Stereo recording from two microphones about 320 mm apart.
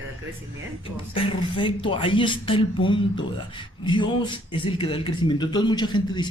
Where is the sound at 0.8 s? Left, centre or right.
Centre.